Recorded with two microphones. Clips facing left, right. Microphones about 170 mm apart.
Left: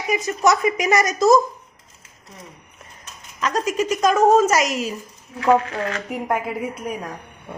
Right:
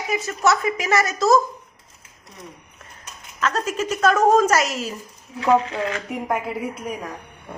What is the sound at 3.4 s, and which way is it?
A woman's voice, 10° left (ahead or behind).